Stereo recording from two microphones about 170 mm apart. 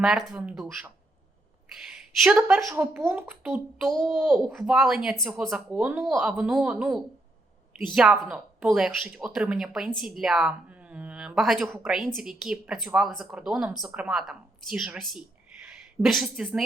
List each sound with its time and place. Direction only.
0.0 s speech: 5° right (ahead or behind)
1.9 s a woman's voice: 5° right (ahead or behind)
4.2 s a child's voice: 10° right (ahead or behind)
4.4 s a woman's voice: centre (ahead or behind)